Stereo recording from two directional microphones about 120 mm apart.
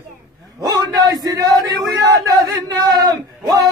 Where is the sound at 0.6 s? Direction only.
35° right (ahead or behind).